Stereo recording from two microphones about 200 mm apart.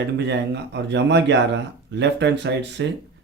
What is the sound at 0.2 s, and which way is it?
A man's voice, 60° right (ahead or behind).